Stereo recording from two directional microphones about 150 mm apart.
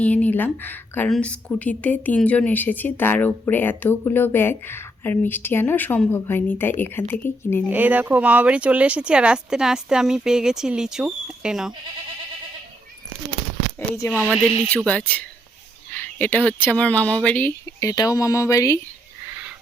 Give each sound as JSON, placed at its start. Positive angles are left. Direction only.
{"t": 0.0, "sound": "a woman's voice", "side_deg": 10}
{"t": 7.7, "sound": "speech", "side_deg": -10}
{"t": 13.7, "sound": "a woman's voice", "side_deg": 15}
{"t": 17.7, "sound": "speech", "side_deg": 25}